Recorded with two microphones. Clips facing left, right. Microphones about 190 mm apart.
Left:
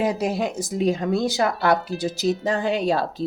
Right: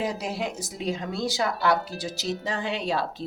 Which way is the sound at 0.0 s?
50° left (ahead or behind).